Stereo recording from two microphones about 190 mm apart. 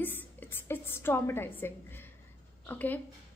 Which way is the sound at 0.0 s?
10° left (ahead or behind).